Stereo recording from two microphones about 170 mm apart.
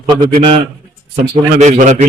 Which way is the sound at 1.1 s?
45° right (ahead or behind).